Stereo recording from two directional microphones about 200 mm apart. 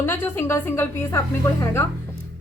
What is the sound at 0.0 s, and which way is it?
A woman's voice, 10° left (ahead or behind).